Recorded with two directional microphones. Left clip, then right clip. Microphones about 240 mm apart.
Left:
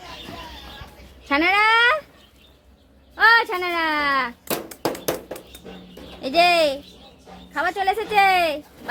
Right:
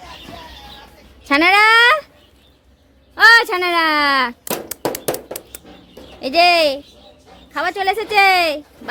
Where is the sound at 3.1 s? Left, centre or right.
Right.